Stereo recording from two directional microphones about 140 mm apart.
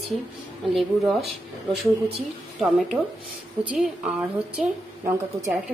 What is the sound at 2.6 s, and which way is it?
A woman's voice, centre (ahead or behind).